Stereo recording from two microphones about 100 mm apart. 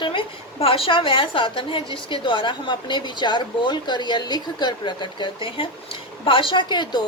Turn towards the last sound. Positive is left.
turn(degrees=50)  # may be behind; listen again after turning